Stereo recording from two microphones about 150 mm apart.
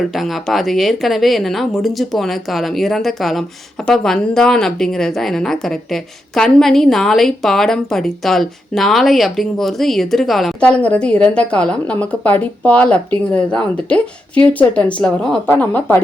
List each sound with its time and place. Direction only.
0.1 s a woman's voice: centre (ahead or behind)